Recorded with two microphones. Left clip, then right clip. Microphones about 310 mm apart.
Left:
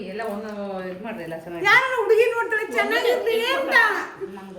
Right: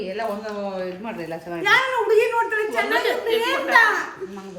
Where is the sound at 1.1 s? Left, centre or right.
Right.